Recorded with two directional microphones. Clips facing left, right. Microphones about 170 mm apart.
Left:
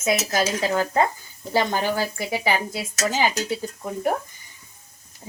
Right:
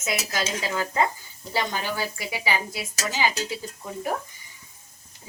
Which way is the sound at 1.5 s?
50° left (ahead or behind).